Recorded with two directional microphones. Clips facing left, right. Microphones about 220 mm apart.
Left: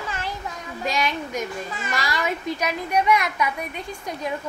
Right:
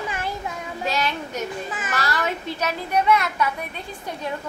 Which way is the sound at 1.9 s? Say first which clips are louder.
Even; 10° left (ahead or behind).